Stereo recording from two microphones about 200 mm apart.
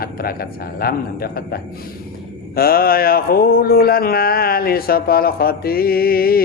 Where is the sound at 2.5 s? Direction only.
50° left (ahead or behind).